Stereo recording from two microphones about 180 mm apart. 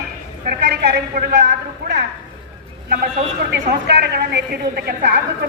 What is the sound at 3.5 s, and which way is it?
A woman's voice, 65° right (ahead or behind).